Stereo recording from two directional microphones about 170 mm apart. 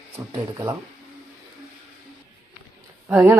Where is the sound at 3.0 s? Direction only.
15° right (ahead or behind).